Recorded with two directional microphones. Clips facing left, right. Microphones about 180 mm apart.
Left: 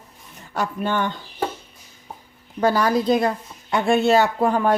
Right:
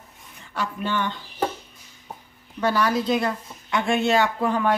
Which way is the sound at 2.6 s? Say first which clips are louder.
Left 3 dB; 45° left (ahead or behind).